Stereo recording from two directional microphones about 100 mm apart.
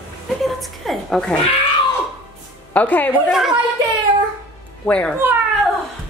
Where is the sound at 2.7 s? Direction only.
15° left (ahead or behind).